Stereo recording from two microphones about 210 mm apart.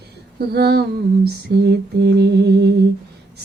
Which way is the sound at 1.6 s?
55° right (ahead or behind).